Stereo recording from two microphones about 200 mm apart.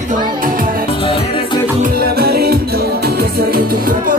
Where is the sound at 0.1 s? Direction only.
45° right (ahead or behind).